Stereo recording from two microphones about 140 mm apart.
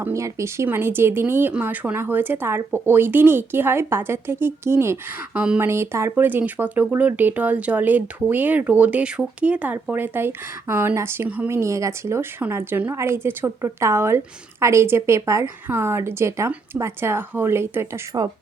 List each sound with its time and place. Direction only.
0.0 s speech: 20° right (ahead or behind)